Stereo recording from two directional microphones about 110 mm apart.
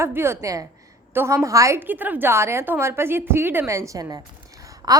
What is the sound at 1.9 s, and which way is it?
A woman's voice, 15° right (ahead or behind).